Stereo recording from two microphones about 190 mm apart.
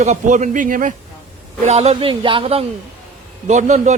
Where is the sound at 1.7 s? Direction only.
35° right (ahead or behind).